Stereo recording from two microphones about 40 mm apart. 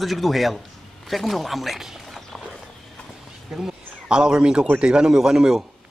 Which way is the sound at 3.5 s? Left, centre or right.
Centre.